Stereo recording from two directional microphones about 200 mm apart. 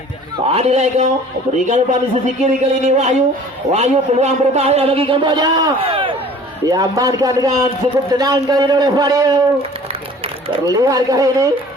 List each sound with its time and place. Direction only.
0.4 s a man's voice: 30° right (ahead or behind)
10.8 s speech: 15° right (ahead or behind)